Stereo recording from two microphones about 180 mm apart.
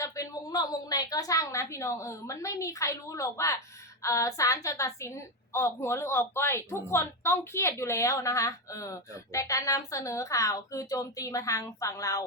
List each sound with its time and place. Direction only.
0.0 s a woman's voice: 20° left (ahead or behind)